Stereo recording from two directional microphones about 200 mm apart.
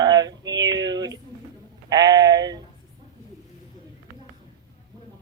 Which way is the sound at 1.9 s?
20° right (ahead or behind).